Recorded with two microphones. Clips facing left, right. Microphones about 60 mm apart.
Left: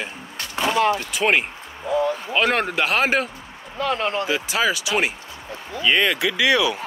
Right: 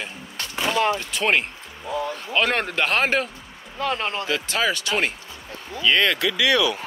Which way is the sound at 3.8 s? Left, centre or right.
Left.